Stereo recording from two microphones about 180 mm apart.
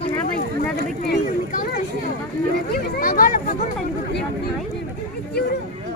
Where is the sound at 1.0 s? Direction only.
50° left (ahead or behind).